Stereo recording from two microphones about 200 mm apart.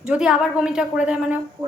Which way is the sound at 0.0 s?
5° right (ahead or behind).